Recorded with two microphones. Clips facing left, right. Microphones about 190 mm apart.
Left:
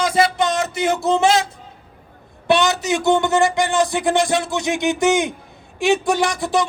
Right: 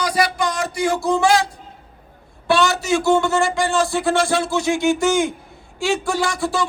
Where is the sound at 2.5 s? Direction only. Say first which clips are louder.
Even; 20° left (ahead or behind).